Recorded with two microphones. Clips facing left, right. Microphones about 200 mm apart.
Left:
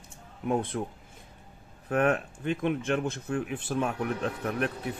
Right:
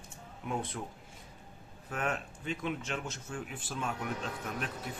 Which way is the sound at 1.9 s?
60° left (ahead or behind).